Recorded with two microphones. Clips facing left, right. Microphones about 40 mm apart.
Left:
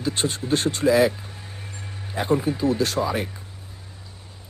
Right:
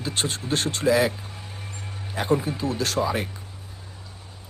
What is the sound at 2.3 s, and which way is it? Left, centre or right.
Speech, left.